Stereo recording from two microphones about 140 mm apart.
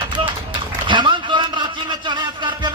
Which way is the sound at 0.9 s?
35° right (ahead or behind).